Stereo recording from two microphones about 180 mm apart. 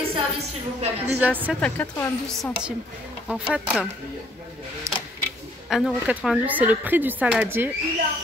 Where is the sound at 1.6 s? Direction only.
10° left (ahead or behind).